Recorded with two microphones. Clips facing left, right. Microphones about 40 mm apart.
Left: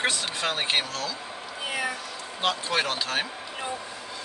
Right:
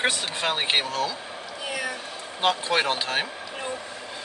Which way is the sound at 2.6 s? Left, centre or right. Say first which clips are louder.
Right 3 dB; centre.